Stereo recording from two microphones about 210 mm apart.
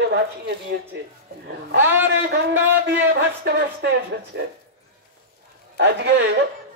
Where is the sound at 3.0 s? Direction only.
55° right (ahead or behind).